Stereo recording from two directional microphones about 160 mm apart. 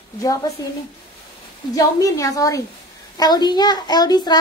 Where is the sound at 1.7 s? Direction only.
20° left (ahead or behind).